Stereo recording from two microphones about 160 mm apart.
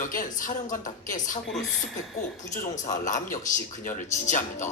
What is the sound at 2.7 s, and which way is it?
A man's voice, 50° left (ahead or behind).